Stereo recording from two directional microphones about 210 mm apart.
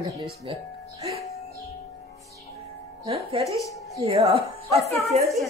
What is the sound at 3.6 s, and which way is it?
Music, 15° left (ahead or behind).